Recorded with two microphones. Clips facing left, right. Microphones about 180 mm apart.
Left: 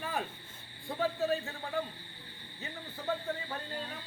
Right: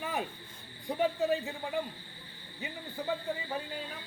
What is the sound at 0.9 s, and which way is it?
Speech, 20° right (ahead or behind).